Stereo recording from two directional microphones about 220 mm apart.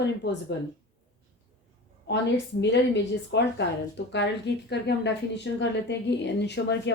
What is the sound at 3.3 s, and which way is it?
A woman's voice, 50° left (ahead or behind).